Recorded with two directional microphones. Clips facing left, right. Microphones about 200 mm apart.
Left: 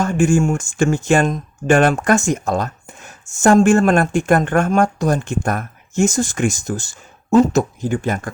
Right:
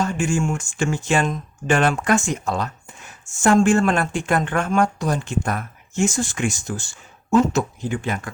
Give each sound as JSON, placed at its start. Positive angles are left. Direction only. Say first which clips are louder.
{"t": 0.0, "sound": "speech", "louder": "left 6 dB", "side_deg": 50}